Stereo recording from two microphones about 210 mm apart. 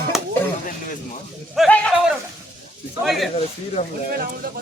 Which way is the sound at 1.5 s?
5° left (ahead or behind).